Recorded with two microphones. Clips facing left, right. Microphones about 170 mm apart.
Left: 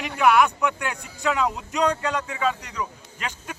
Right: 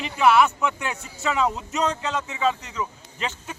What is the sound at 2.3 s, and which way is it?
Speech, 25° right (ahead or behind).